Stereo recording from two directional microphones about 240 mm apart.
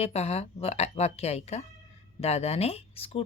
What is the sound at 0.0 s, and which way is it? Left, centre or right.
A woman's voice, left.